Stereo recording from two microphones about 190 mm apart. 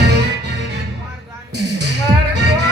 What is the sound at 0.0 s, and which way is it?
Music, 65° right (ahead or behind).